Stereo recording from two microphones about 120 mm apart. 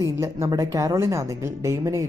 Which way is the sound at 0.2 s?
25° right (ahead or behind).